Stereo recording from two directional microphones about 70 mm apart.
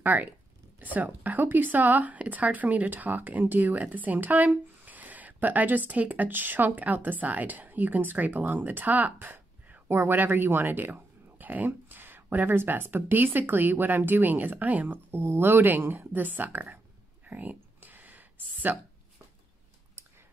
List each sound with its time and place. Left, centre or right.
0.0 s speech: right
15.0 s speech: right
17.3 s a sound: right